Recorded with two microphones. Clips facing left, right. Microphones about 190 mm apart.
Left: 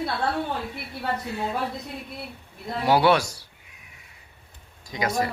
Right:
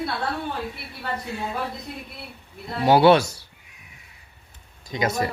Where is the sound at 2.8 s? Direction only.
25° right (ahead or behind).